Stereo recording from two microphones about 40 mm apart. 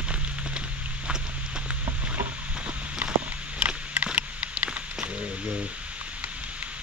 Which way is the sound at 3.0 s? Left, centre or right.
Right.